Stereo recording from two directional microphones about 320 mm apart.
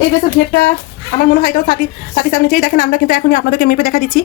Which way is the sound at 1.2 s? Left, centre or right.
Left.